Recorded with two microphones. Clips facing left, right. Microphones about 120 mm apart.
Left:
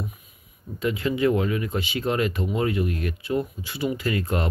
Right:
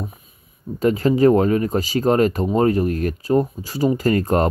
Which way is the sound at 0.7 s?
40° right (ahead or behind).